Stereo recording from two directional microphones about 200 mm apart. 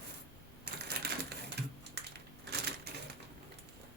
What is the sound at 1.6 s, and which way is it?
Typing, 55° right (ahead or behind).